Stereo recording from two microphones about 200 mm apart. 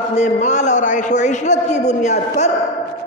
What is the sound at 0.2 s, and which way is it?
A man's voice, 35° left (ahead or behind).